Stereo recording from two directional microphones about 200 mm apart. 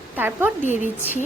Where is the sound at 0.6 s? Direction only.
35° left (ahead or behind).